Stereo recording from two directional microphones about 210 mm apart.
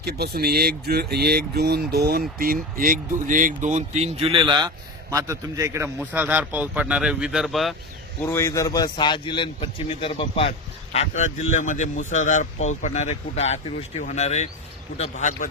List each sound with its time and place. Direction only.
0.0 s a man's voice: 50° right (ahead or behind); by 7.8 s centre (ahead or behind)
8.2 s speech: 10° left (ahead or behind); by 15.4 s 35° left (ahead or behind)